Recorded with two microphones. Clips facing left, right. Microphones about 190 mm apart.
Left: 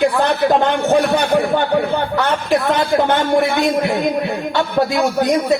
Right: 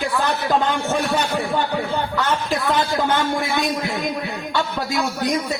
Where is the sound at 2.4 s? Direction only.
60° left (ahead or behind).